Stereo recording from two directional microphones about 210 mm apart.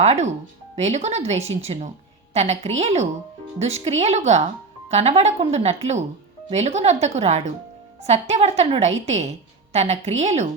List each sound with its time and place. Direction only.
0.0 s speech: 30° right (ahead or behind)